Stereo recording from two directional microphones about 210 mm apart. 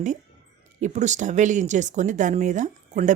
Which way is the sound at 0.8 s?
35° right (ahead or behind).